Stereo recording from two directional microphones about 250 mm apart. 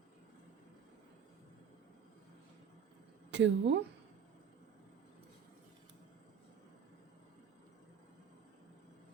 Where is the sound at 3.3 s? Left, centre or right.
Right.